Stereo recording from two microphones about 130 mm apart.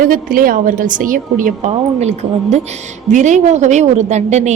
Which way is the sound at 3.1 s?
70° right (ahead or behind).